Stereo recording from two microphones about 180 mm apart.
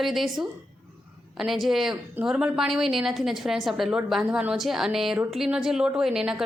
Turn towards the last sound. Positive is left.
turn(degrees=-5)  # may be behind; listen again after turning